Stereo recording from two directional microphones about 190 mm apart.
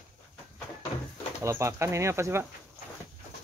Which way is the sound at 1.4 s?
15° right (ahead or behind).